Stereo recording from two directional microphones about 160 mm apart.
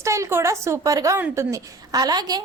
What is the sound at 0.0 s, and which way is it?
A woman's voice, 20° right (ahead or behind).